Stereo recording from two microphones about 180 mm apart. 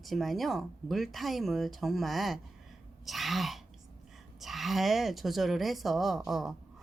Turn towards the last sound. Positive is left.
turn(degrees=0)  # may be behind; listen again after turning